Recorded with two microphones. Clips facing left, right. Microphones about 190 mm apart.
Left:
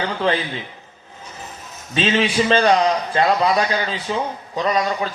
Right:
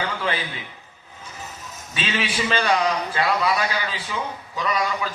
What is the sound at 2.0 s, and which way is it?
A man's voice, 35° left (ahead or behind).